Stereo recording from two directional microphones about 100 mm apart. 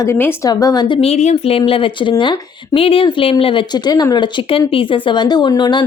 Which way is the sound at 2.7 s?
70° left (ahead or behind).